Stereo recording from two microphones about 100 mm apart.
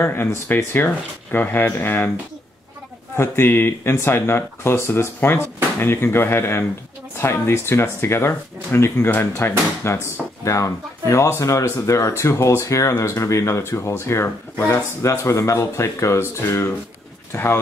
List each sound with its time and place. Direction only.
0.0 s speech: 25° left (ahead or behind)
3.2 s speech: 25° left (ahead or behind)